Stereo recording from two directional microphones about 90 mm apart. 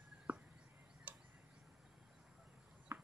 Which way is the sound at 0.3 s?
15° right (ahead or behind).